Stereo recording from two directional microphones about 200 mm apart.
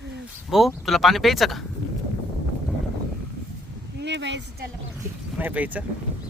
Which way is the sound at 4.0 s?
60° right (ahead or behind).